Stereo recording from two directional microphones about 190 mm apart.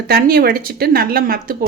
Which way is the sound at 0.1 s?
50° right (ahead or behind).